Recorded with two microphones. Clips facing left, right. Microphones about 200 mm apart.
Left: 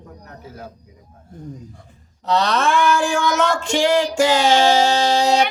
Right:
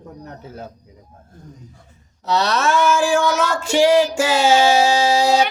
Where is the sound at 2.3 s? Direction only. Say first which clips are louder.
Even; 5° right (ahead or behind).